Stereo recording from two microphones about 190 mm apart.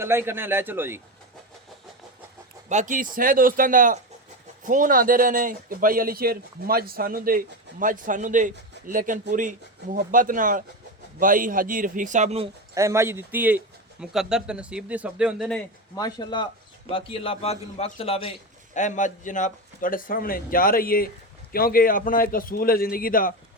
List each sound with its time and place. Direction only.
0.0 s a man's voice: 10° right (ahead or behind)
2.6 s a man's voice: 40° right (ahead or behind)
12.7 s a man's voice: 15° right (ahead or behind)
16.0 s a man's voice: 20° left (ahead or behind)
18.7 s a man's voice: 40° left (ahead or behind)